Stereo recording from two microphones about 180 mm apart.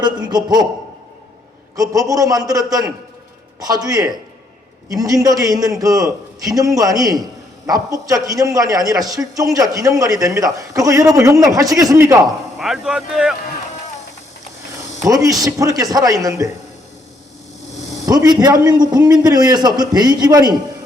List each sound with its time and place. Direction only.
0.0 s a man's voice: 25° right (ahead or behind)
1.7 s a man's voice: 20° right (ahead or behind)
12.5 s speech: centre (ahead or behind)
15.0 s a man's voice: 20° right (ahead or behind)
18.0 s a man's voice: 20° right (ahead or behind)